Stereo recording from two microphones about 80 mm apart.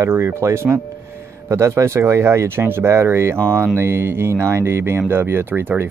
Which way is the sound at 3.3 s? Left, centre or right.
Centre.